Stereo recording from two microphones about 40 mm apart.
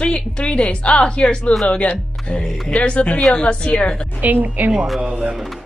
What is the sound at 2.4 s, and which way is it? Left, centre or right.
Speech, centre.